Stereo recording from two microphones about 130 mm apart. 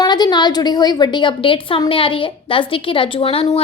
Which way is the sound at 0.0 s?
35° left (ahead or behind).